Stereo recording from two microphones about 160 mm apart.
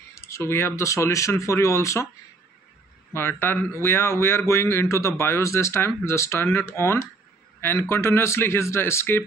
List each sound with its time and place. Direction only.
0.1 s speech: 15° left (ahead or behind)
3.1 s speech: 15° left (ahead or behind)